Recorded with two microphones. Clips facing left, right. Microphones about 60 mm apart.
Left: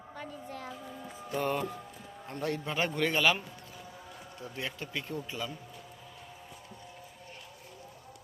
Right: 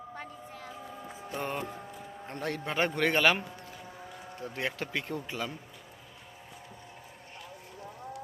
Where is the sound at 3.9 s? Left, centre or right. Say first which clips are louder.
Right 3 dB; right.